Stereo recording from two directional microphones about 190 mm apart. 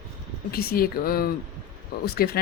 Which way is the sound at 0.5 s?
50° left (ahead or behind).